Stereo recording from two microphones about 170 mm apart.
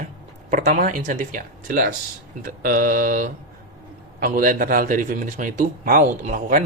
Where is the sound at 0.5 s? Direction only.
50° right (ahead or behind).